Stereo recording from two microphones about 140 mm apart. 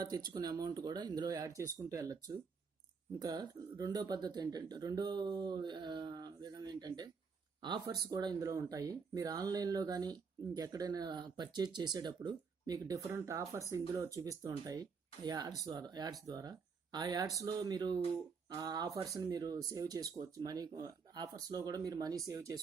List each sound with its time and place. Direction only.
0.0 s speech: 30° right (ahead or behind)